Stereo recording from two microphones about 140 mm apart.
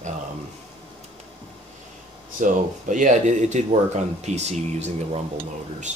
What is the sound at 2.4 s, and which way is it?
Speech, 70° right (ahead or behind).